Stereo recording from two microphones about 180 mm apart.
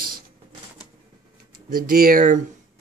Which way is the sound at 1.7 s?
55° right (ahead or behind).